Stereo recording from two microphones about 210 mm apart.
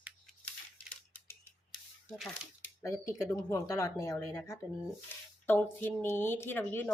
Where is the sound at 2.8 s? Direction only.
15° left (ahead or behind).